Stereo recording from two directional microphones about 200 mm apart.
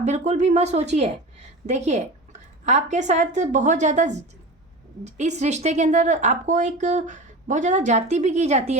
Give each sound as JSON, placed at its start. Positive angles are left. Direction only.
{"t": 0.0, "sound": "a woman's voice", "side_deg": -35}